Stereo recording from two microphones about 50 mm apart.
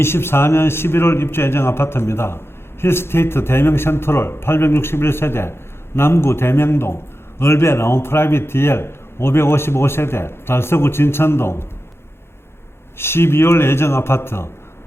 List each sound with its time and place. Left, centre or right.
0.0 s a man's voice: left
13.0 s a man's voice: left